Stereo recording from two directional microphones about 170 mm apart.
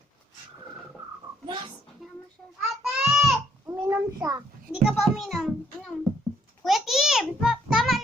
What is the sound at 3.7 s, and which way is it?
Child singing, 15° right (ahead or behind).